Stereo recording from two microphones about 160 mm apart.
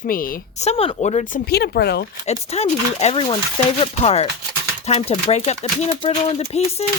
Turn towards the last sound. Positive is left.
turn(degrees=40)  # may be behind; listen again after turning